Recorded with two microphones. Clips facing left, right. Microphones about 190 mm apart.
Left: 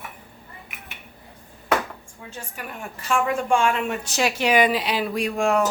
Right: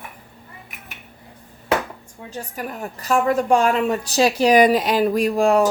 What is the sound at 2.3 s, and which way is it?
A woman's voice, 40° right (ahead or behind).